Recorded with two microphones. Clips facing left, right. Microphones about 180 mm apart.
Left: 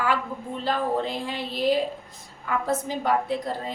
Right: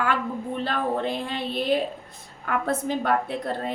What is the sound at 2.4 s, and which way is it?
A woman's voice, 60° right (ahead or behind).